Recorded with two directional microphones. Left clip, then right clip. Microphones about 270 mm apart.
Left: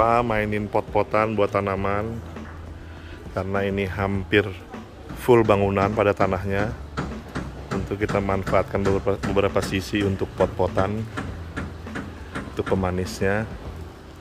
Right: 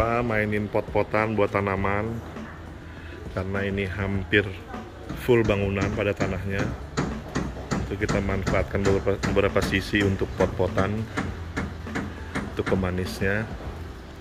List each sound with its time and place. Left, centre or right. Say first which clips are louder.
0.0 s speech: left 4 dB; centre
3.3 s speech: left 4 dB; centre
7.0 s a sound: right 3 dB; right
7.9 s speech: left 4 dB; centre
11.1 s a sound: right 2 dB; right
12.5 s speech: left 3 dB; centre